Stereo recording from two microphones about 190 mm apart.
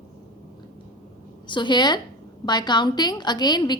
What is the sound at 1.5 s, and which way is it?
A woman's voice, 25° left (ahead or behind).